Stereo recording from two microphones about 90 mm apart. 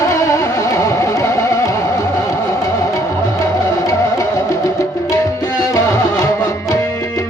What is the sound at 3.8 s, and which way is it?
Music, 40° left (ahead or behind).